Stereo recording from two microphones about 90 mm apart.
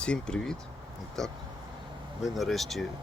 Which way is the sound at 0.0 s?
10° left (ahead or behind).